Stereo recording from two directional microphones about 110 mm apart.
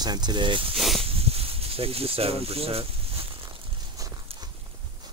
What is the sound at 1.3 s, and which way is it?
Speech, 60° right (ahead or behind).